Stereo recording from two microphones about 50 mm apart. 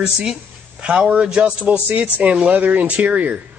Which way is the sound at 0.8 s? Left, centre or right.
Right.